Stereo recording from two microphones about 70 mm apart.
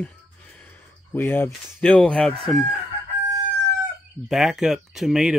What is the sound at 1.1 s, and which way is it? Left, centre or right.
Speech, left.